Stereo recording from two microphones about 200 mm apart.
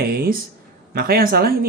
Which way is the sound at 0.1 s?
50° right (ahead or behind).